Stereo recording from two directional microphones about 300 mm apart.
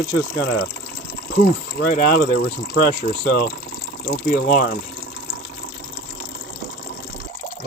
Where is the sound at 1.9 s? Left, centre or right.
Left.